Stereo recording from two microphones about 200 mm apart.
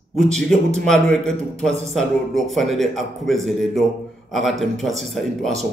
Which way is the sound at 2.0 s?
Centre (ahead or behind).